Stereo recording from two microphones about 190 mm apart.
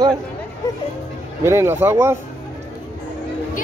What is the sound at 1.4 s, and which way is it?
Speech, 15° right (ahead or behind).